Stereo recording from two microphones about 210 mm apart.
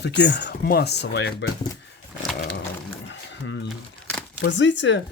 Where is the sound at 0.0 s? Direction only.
55° left (ahead or behind).